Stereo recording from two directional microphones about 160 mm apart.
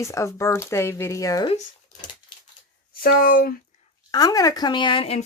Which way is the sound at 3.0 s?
65° left (ahead or behind).